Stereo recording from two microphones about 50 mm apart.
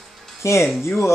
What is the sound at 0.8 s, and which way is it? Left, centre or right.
Speech, left.